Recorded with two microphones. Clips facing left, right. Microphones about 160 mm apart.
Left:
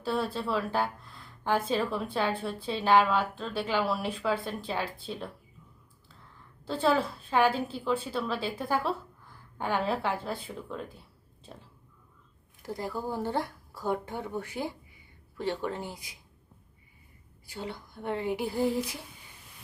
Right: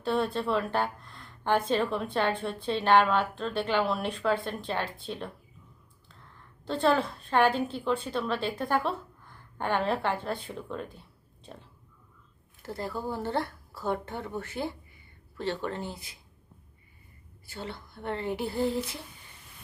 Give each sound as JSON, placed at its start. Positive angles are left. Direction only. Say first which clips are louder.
{"t": 0.0, "sound": "a woman's voice", "louder": "right 2 dB", "side_deg": 5}
{"t": 6.7, "sound": "a woman's voice", "louder": "right 1 dB", "side_deg": 5}
{"t": 12.6, "sound": "speech", "louder": "even", "side_deg": 15}
{"t": 17.4, "sound": "speech", "louder": "left 1 dB", "side_deg": 15}